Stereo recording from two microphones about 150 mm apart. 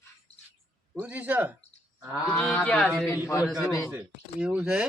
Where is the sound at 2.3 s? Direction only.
10° left (ahead or behind).